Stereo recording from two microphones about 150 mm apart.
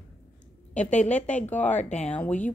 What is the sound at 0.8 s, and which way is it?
Speech, 50° left (ahead or behind).